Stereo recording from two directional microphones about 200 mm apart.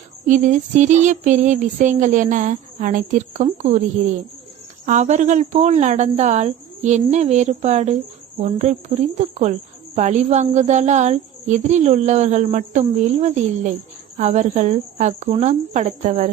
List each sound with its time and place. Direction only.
0.3 s a woman's voice: 40° right (ahead or behind)
4.9 s a woman's voice: 35° right (ahead or behind)